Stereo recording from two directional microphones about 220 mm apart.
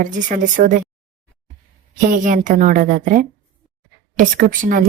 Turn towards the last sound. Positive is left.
turn(degrees=-40)  # may be behind; listen again after turning